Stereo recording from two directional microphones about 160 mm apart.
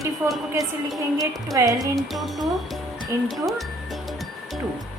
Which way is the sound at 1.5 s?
20° right (ahead or behind).